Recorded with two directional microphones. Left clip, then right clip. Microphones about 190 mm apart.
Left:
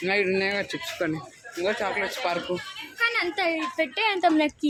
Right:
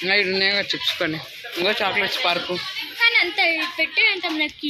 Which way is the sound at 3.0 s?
55° left (ahead or behind).